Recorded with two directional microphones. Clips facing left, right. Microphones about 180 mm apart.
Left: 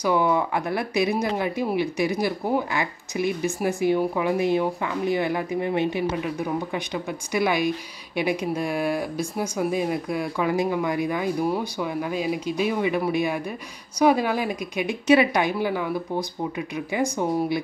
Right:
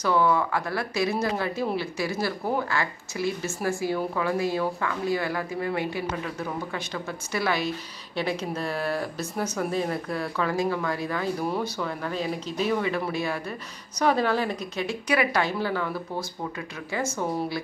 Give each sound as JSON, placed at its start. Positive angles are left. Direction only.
{"t": 0.0, "sound": "speech", "side_deg": 15}